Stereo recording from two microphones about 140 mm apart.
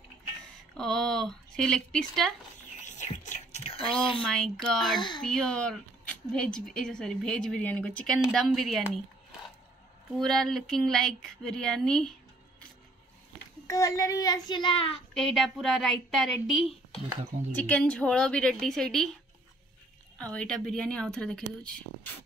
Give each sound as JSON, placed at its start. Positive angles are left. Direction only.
{"t": 0.7, "sound": "speech", "side_deg": 5}
{"t": 2.8, "sound": "whispering", "side_deg": 55}
{"t": 4.2, "sound": "speech", "side_deg": 5}
{"t": 10.1, "sound": "speech", "side_deg": 5}
{"t": 13.7, "sound": "a child's voice", "side_deg": 25}
{"t": 15.1, "sound": "a woman's voice", "side_deg": 0}
{"t": 20.2, "sound": "speech", "side_deg": 10}